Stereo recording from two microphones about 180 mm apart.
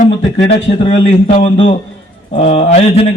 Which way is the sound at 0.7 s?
30° left (ahead or behind).